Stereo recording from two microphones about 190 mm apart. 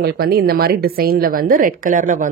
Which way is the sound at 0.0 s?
55° right (ahead or behind).